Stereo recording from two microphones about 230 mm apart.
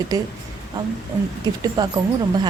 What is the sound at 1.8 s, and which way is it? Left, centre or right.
Speech, centre.